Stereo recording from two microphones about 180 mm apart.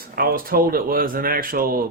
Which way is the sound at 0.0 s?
55° right (ahead or behind).